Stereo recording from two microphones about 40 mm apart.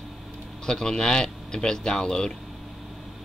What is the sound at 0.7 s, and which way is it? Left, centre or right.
A man's voice, centre.